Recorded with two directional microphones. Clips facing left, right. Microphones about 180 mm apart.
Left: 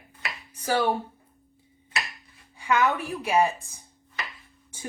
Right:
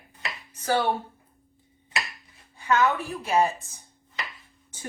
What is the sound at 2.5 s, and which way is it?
Speech, 10° left (ahead or behind).